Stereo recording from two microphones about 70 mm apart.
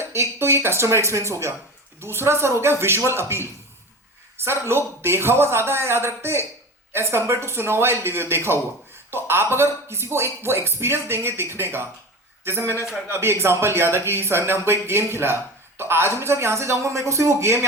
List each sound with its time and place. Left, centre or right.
0.0 s speech: right